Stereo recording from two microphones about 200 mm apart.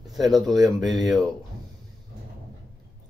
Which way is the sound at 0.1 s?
Centre (ahead or behind).